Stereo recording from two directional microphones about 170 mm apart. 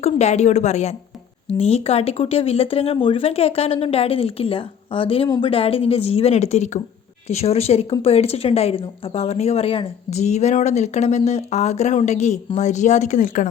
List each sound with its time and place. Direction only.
0.0 s speech: 40° left (ahead or behind)